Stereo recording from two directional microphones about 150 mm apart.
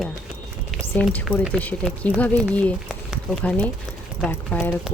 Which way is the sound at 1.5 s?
10° left (ahead or behind).